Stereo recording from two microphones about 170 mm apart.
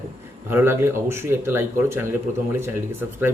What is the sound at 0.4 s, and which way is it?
Speech, 15° right (ahead or behind).